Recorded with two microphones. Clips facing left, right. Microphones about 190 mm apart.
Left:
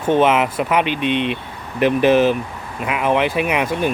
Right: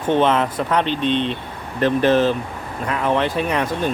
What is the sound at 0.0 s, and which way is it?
Speech, 10° left (ahead or behind).